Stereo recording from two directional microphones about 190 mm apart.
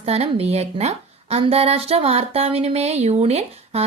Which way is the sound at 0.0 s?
35° right (ahead or behind).